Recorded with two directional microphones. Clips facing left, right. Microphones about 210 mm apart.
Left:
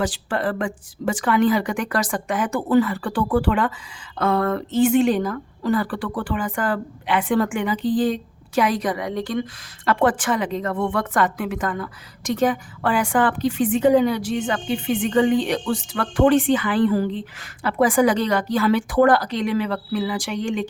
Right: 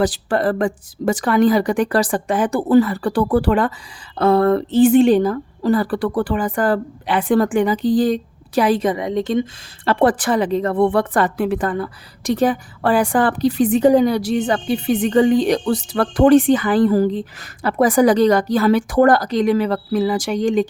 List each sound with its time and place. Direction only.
0.0 s speech: 40° right (ahead or behind)